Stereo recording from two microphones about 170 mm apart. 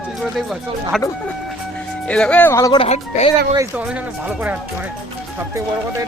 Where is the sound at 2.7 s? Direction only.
40° left (ahead or behind).